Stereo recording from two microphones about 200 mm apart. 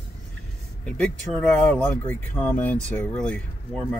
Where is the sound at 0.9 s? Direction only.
5° left (ahead or behind).